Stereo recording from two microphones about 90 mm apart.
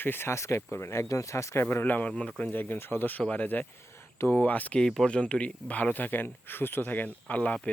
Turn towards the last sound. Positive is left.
turn(degrees=15)  # may be behind; listen again after turning